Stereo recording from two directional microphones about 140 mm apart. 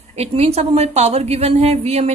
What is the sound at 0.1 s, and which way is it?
A woman's voice, 45° right (ahead or behind).